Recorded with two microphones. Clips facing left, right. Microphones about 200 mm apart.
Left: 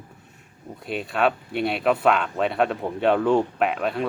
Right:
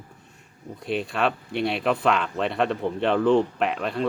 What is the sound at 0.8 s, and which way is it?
Speech, centre (ahead or behind).